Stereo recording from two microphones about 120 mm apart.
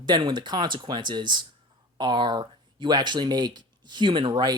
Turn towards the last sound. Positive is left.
turn(degrees=-40)  # may be behind; listen again after turning